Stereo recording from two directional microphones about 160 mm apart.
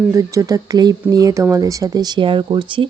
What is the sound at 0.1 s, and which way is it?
Speech, 20° right (ahead or behind).